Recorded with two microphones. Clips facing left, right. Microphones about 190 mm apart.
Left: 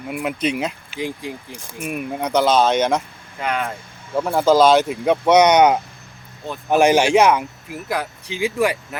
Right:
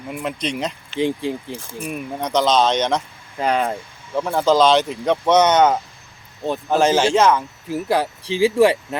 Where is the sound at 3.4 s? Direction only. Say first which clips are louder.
Right 4 dB; 35° right (ahead or behind).